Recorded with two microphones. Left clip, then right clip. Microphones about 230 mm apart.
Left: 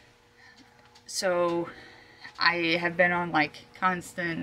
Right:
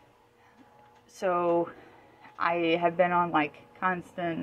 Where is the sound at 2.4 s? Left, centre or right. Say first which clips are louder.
Left 1 dB; left.